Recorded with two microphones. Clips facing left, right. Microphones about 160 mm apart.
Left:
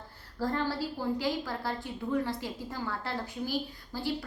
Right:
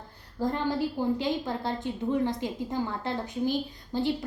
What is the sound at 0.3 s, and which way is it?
A woman's voice, 20° right (ahead or behind).